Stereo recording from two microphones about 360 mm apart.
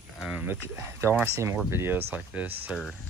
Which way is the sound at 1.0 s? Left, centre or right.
Centre.